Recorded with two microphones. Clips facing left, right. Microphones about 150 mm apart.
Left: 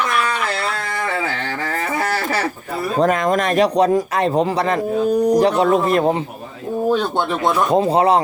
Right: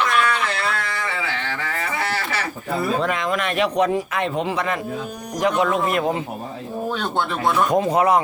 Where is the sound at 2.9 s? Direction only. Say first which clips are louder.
Left 6 dB; 40° left (ahead or behind).